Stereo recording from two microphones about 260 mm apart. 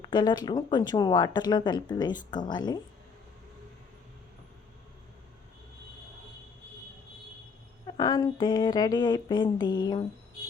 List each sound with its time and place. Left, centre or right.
0.0 s speech: centre
7.9 s speech: centre